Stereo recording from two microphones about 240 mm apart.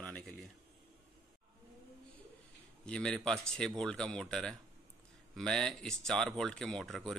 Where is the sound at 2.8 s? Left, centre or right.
Centre.